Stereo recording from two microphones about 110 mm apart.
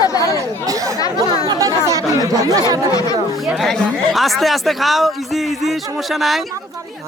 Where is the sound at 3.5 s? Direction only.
Centre (ahead or behind).